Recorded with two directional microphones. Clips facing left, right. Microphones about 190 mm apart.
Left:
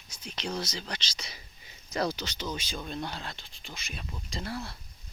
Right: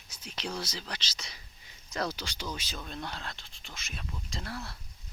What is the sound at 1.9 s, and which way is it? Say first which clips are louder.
Speech: left 4 dB; 5° right (ahead or behind).